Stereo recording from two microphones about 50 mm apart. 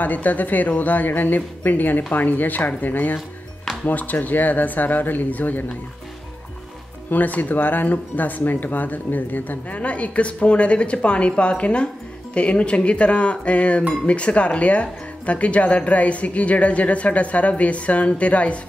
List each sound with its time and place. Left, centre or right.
0.0 s speech: left
7.1 s speech: left